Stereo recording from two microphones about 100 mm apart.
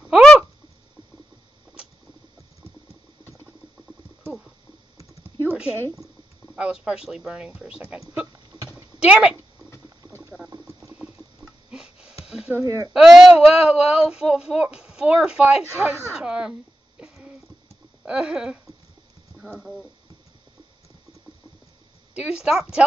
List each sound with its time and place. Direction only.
5.5 s speech: 10° right (ahead or behind)
9.0 s speech: 10° right (ahead or behind)
10.9 s a sound: 10° right (ahead or behind)
12.6 s speech: 30° right (ahead or behind)
12.9 s speech: 5° right (ahead or behind)
17.0 s a sound: 10° right (ahead or behind)
19.4 s speech: centre (ahead or behind)
22.1 s a woman's voice: 10° right (ahead or behind)